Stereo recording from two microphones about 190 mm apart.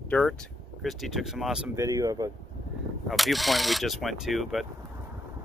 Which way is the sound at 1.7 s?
15° right (ahead or behind).